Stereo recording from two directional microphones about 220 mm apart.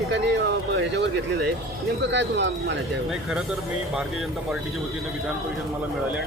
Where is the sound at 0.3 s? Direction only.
55° right (ahead or behind).